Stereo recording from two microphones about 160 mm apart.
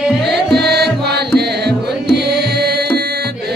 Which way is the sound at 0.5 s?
90° right.